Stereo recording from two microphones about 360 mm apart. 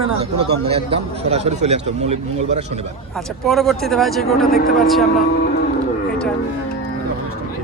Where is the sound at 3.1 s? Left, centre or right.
Centre.